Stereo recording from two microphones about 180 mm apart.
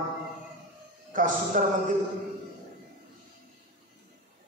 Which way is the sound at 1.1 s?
45° right (ahead or behind).